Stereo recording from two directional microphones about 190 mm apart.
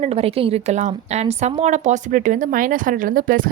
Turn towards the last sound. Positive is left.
turn(degrees=-45)  # may be behind; listen again after turning